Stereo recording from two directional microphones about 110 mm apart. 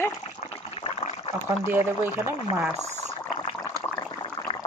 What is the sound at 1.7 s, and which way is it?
Speech, 20° right (ahead or behind).